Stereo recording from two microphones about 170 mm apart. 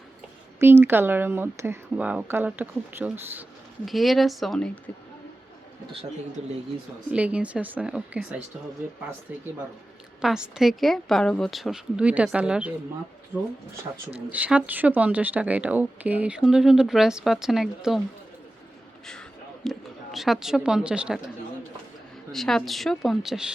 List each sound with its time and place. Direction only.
0.6 s speech: 15° right (ahead or behind)
3.8 s a woman's voice: centre (ahead or behind)
7.1 s speech: 5° right (ahead or behind)
10.2 s a woman's voice: 5° right (ahead or behind)
19.6 s a woman's voice: centre (ahead or behind)
22.3 s a woman's voice: centre (ahead or behind)